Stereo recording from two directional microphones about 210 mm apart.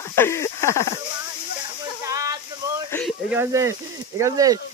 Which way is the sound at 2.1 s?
15° right (ahead or behind).